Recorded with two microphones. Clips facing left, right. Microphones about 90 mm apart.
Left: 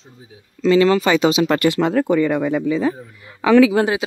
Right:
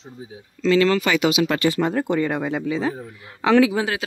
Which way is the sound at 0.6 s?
20° left (ahead or behind).